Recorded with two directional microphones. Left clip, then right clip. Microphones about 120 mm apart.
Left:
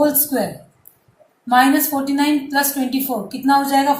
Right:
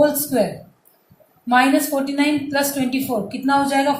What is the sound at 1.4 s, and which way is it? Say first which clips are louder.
A woman's voice: left 2 dB; 70° right (ahead or behind).